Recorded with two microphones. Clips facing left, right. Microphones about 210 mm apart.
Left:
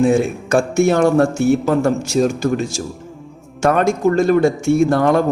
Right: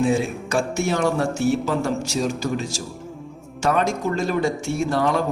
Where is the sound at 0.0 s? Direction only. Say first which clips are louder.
Left 6 dB; 50° left (ahead or behind).